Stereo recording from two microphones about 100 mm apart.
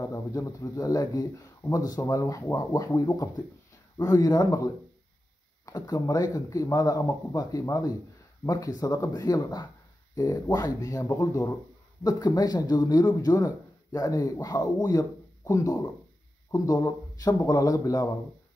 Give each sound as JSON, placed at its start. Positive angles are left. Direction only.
{"t": 0.0, "sound": "speech", "side_deg": 35}
{"t": 5.7, "sound": "speech", "side_deg": 35}